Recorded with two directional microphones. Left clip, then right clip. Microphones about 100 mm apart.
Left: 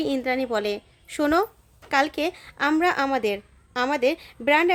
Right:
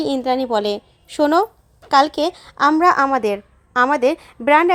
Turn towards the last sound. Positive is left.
turn(degrees=-20)  # may be behind; listen again after turning